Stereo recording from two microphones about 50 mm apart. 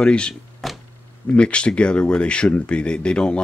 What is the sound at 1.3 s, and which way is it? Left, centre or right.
Speech, left.